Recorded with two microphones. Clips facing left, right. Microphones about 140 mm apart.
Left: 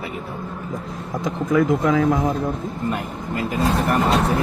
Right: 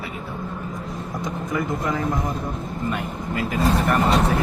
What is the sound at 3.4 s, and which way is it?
Speech, centre (ahead or behind).